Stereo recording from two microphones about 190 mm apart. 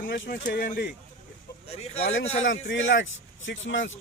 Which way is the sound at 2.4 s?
80° left.